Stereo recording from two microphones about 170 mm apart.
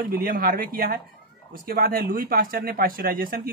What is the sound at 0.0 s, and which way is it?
Speech, 60° right (ahead or behind).